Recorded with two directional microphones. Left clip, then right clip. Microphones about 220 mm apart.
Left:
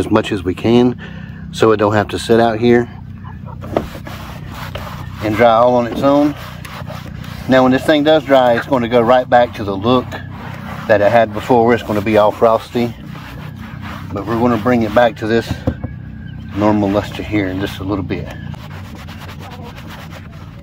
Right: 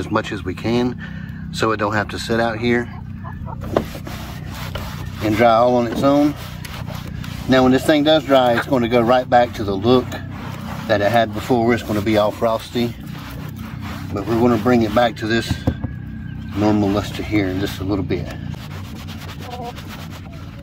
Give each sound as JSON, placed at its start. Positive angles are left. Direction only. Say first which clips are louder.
{"t": 0.0, "sound": "speech", "louder": "left 6 dB", "side_deg": 40}
{"t": 5.2, "sound": "speech", "louder": "left 3 dB", "side_deg": 5}
{"t": 7.4, "sound": "speech", "louder": "left 3 dB", "side_deg": 10}
{"t": 13.8, "sound": "speech", "louder": "left 2 dB", "side_deg": 5}